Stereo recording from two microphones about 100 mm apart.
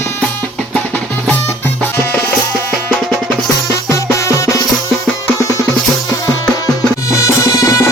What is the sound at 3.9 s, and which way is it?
Music, 30° left (ahead or behind).